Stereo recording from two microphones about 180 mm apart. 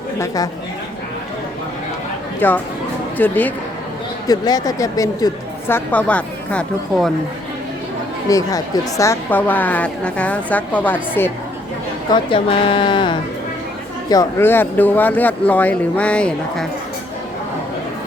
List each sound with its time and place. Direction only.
0.2 s speech: 20° left (ahead or behind)
2.4 s a woman's voice: 10° left (ahead or behind)
4.3 s a woman's voice: 20° left (ahead or behind)
8.3 s a woman's voice: 20° left (ahead or behind)
12.1 s speech: 30° left (ahead or behind)
14.1 s a woman's voice: 15° left (ahead or behind)